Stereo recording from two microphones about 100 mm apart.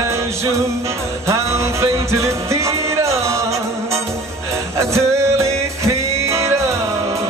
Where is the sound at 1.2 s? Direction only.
30° right (ahead or behind).